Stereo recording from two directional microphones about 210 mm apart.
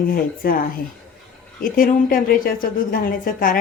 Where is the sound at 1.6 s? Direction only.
40° left (ahead or behind).